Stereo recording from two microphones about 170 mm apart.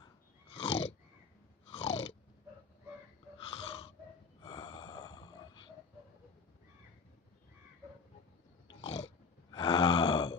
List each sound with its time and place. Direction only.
0.0 s a sound: 35° left (ahead or behind)
1.7 s chewing: 35° left (ahead or behind)
3.3 s wheeze: 35° left (ahead or behind)
4.4 s snort: 25° left (ahead or behind)
8.6 s a sound: 35° left (ahead or behind)
9.5 s groan: 25° left (ahead or behind)